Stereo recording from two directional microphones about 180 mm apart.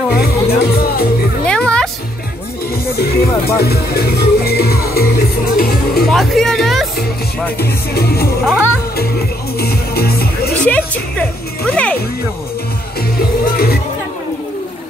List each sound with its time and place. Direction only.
0.1 s speech: 60° left (ahead or behind)
1.4 s music: 5° left (ahead or behind)
3.0 s speech: 60° left (ahead or behind)
6.0 s speech: centre (ahead or behind)
7.5 s speech: 60° left (ahead or behind)
9.6 s music: 60° left (ahead or behind)
10.5 s speech: 5° left (ahead or behind)
13.2 s music: 60° left (ahead or behind)